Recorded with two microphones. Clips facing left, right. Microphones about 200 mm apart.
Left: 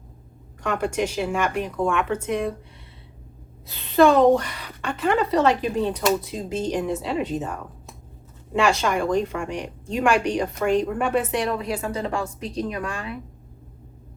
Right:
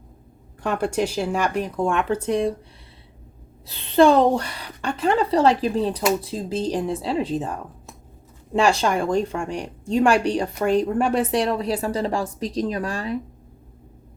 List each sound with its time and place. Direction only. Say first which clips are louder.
0.6 s speech: right 1 dB; 35° right (ahead or behind)
3.7 s speech: right 1 dB; 30° right (ahead or behind)
8.8 s speech: right 1 dB; 30° right (ahead or behind)